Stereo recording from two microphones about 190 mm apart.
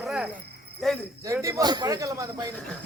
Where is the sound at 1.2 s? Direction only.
15° right (ahead or behind).